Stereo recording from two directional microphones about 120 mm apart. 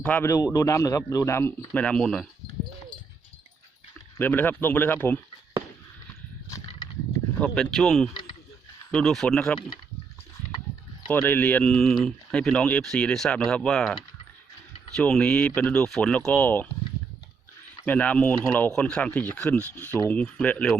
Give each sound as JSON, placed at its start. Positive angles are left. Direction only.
{"t": 0.0, "sound": "speech", "side_deg": 15}
{"t": 0.3, "sound": "speech", "side_deg": 30}
{"t": 4.2, "sound": "speech", "side_deg": 15}
{"t": 7.3, "sound": "speech", "side_deg": 10}
{"t": 11.1, "sound": "speech", "side_deg": 15}
{"t": 17.8, "sound": "speech", "side_deg": 10}